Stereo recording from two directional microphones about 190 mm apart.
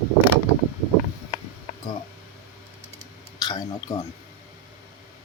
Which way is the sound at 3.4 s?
20° left (ahead or behind).